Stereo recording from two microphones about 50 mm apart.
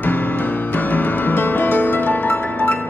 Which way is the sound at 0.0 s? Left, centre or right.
Left.